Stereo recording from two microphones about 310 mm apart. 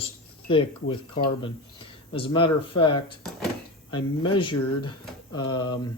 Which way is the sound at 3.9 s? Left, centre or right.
Centre.